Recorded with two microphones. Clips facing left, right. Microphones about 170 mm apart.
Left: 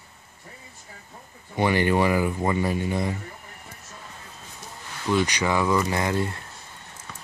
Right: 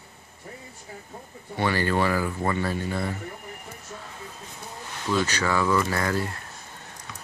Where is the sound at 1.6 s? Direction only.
15° left (ahead or behind).